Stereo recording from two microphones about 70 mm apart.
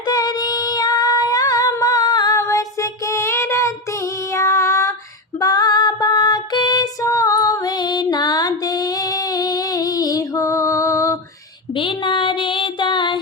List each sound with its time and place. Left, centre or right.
0.1 s female singing: left
2.3 s child singing: left
4.4 s female singing: left
5.4 s female singing: left
7.0 s female singing: left